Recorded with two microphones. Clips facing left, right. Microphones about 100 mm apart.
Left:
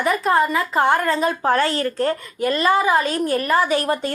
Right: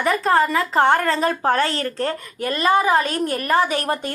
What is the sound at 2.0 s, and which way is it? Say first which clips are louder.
Speech: left 3 dB; 25° left (ahead or behind).